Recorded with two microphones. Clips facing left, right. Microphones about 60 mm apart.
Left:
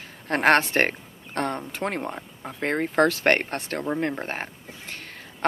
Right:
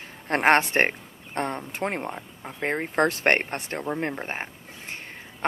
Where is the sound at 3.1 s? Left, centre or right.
Right.